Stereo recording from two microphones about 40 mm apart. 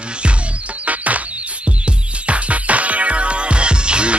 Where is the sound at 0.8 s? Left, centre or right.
Right.